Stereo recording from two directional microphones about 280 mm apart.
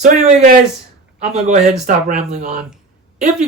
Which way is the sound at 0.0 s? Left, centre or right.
Right.